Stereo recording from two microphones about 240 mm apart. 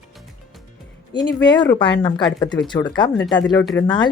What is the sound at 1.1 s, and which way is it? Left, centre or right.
Speech, centre.